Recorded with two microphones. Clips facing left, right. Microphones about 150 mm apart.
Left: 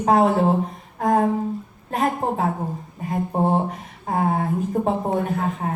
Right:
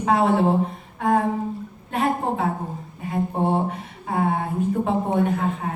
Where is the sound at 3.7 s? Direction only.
40° left (ahead or behind).